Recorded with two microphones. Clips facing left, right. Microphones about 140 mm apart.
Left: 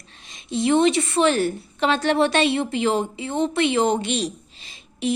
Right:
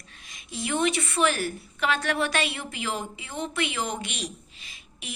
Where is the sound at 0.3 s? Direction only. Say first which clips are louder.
Left 11 dB; 25° left (ahead or behind).